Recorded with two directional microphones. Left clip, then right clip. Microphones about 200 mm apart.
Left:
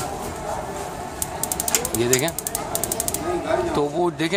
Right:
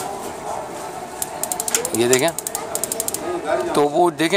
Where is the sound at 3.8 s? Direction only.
30° right (ahead or behind).